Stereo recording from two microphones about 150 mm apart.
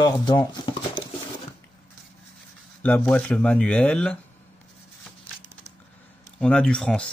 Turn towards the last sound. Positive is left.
turn(degrees=5)  # may be behind; listen again after turning